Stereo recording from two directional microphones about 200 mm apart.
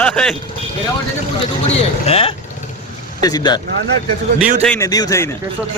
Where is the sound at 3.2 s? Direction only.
20° left (ahead or behind).